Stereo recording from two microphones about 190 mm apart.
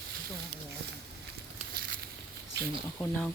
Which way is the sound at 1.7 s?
50° right (ahead or behind).